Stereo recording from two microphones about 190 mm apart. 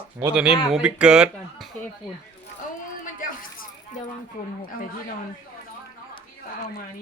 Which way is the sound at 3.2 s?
45° left (ahead or behind).